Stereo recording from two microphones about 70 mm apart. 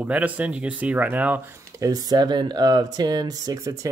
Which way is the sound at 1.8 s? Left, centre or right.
Right.